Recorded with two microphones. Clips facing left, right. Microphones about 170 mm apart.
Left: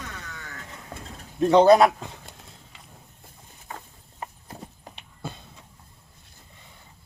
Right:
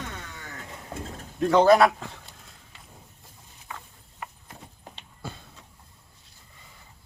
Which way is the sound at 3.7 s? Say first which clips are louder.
Left 2 dB; 40° left (ahead or behind).